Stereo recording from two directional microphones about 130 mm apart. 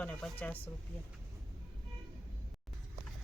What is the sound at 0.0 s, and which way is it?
Speech, 10° left (ahead or behind).